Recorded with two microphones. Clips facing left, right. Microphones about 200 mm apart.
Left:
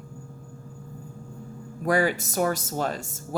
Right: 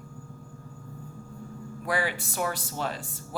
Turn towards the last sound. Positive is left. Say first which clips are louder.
# left 4 dB
turn(degrees=45)  # may be behind; listen again after turning